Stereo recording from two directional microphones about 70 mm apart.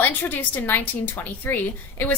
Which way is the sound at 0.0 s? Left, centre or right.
Left.